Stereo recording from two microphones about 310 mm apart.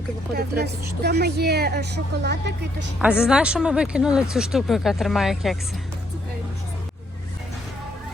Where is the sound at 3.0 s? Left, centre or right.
Centre.